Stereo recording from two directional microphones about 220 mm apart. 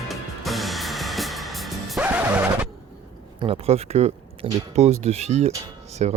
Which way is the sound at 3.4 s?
25° right (ahead or behind).